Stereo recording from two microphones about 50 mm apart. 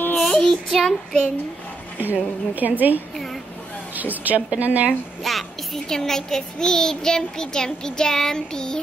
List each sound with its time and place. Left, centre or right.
0.2 s child singing: centre
2.0 s a woman's voice: right
5.2 s a woman's voice: centre
5.9 s child singing: centre